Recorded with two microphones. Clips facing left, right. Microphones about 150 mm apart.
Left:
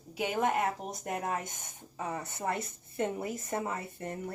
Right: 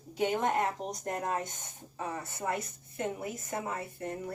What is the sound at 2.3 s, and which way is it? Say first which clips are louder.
A woman's voice: even; 30° left (ahead or behind).